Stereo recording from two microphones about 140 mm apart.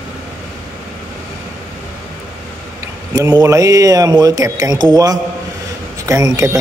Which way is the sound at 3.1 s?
25° right (ahead or behind).